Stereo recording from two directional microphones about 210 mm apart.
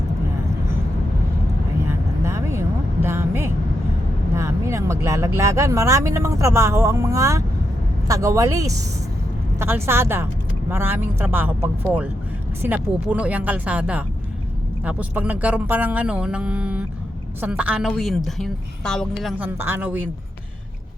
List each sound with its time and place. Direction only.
1.8 s vehicle: 10° right (ahead or behind)
4.4 s a woman's voice: 15° right (ahead or behind); by 19.3 s centre (ahead or behind)
19.4 s speech: 10° right (ahead or behind)